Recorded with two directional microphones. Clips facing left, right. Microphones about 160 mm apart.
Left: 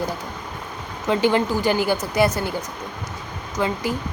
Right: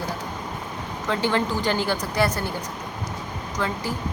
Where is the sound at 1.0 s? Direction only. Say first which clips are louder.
Left 5 dB; 15° left (ahead or behind).